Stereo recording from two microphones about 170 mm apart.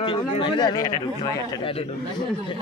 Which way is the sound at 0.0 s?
30° left (ahead or behind).